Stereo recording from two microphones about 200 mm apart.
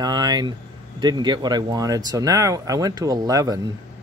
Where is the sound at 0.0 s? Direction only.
20° right (ahead or behind).